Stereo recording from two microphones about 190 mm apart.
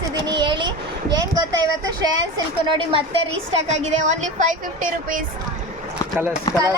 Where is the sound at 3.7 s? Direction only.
35° right (ahead or behind).